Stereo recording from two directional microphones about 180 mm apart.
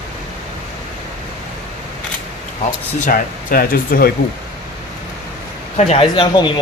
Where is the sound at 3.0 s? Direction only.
55° left (ahead or behind).